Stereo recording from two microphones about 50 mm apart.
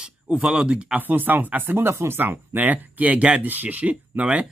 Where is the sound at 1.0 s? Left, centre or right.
Right.